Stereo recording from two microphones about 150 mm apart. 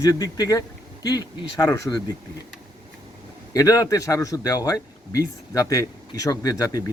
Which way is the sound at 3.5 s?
20° left (ahead or behind).